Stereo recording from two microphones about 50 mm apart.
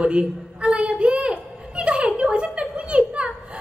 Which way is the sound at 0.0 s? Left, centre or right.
Right.